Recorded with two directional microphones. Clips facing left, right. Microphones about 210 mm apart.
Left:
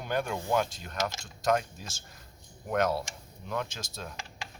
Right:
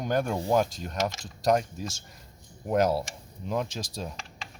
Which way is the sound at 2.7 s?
30° right (ahead or behind).